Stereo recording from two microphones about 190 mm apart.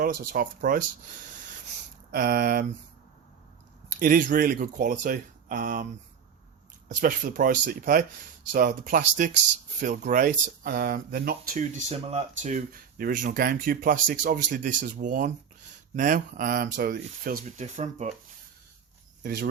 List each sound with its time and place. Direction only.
0.0 s speech: 50° right (ahead or behind)
4.0 s speech: 45° right (ahead or behind)
19.2 s speech: 50° right (ahead or behind)